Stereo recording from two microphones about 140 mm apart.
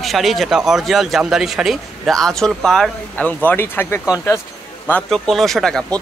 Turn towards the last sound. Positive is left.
turn(degrees=5)  # may be behind; listen again after turning